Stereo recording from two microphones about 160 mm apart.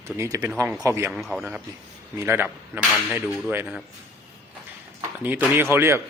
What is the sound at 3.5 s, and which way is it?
Speech, 15° right (ahead or behind).